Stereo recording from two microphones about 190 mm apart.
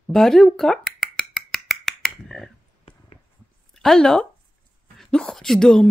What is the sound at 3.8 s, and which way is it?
Speech, centre (ahead or behind).